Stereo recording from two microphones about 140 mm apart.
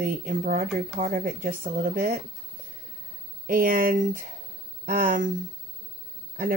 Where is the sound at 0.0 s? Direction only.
75° right (ahead or behind).